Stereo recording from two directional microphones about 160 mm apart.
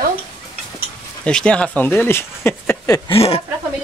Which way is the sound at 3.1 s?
40° left (ahead or behind).